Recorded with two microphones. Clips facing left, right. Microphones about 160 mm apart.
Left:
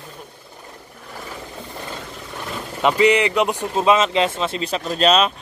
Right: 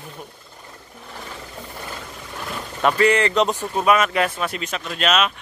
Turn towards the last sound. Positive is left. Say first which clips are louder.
# left 4 dB
turn(degrees=35)  # may be behind; listen again after turning